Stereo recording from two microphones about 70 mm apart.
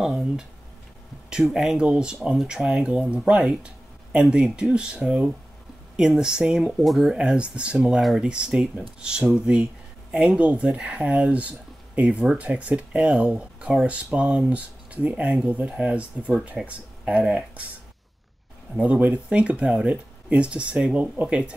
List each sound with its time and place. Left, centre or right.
0.0 s a sound: centre
1.3 s speech: centre
18.8 s speech: centre